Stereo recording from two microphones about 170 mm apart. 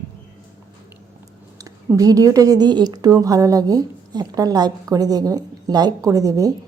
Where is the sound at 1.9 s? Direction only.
20° right (ahead or behind).